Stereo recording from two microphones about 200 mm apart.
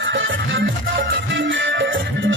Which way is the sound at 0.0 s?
70° right (ahead or behind).